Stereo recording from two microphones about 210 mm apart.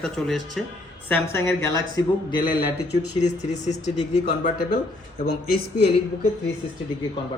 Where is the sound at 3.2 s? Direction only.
35° left (ahead or behind).